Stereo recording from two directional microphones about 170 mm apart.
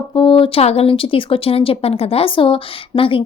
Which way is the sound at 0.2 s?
30° left (ahead or behind).